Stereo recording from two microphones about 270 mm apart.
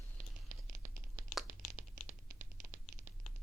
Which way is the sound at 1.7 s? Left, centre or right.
Right.